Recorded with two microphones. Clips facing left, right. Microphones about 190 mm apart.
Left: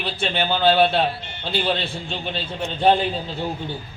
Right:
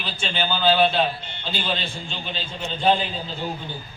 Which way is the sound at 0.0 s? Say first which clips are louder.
Left 4 dB; 60° left (ahead or behind).